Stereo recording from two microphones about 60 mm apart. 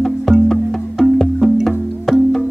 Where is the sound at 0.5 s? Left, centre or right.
Centre.